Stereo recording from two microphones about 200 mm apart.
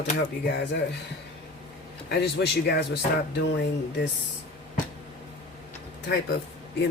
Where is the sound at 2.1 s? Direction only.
55° left (ahead or behind).